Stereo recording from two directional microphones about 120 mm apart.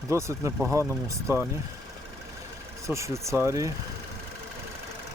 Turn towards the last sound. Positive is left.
turn(degrees=-25)  # may be behind; listen again after turning